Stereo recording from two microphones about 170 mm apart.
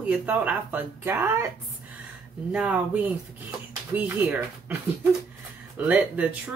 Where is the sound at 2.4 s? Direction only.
5° right (ahead or behind).